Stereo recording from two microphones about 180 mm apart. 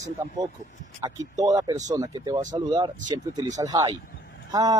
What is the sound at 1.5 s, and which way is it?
Speech, 20° right (ahead or behind).